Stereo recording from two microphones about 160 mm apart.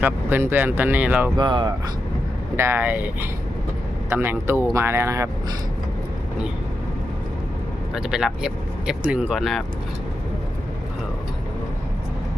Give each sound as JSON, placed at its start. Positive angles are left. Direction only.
{"t": 0.0, "sound": "speech", "side_deg": -15}
{"t": 1.4, "sound": "speech", "side_deg": -30}
{"t": 2.6, "sound": "speech", "side_deg": -15}
{"t": 7.9, "sound": "speech", "side_deg": -5}